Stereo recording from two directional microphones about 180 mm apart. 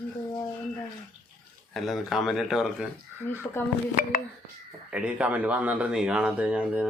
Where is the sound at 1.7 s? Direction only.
Centre (ahead or behind).